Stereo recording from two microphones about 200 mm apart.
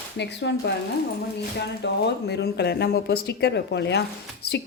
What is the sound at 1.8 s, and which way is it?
A woman's voice, 55° left (ahead or behind).